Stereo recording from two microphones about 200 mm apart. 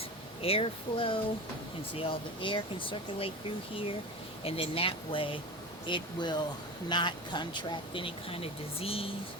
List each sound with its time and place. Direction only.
0.4 s speech: 30° left (ahead or behind)
4.4 s speech: 30° left (ahead or behind)